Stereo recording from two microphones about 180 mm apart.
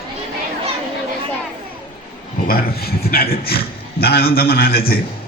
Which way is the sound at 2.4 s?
55° left (ahead or behind).